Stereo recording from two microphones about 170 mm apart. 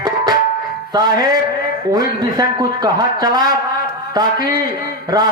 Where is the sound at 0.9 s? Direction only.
25° right (ahead or behind).